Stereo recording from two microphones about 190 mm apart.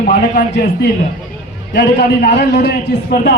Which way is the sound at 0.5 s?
65° left (ahead or behind).